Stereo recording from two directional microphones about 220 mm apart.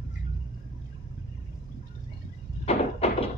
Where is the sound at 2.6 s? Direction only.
30° left (ahead or behind).